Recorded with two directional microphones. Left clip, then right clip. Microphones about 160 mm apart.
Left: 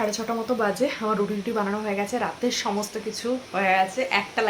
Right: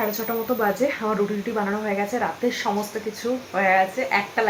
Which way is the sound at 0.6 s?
15° left (ahead or behind).